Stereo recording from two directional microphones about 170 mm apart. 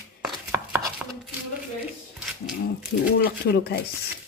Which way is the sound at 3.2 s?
65° left (ahead or behind).